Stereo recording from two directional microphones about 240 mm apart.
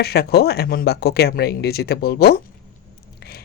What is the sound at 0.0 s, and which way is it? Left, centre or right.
A woman's voice, left.